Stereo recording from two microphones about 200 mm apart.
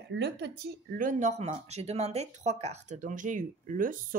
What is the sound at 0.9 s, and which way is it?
A woman's voice, 40° right (ahead or behind).